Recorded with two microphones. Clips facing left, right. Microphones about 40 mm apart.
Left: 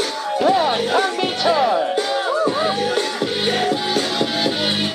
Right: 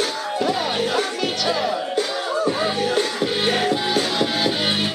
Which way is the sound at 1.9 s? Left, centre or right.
Centre.